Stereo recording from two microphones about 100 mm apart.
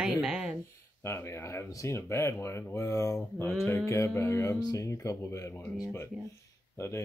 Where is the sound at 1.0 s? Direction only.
25° left (ahead or behind).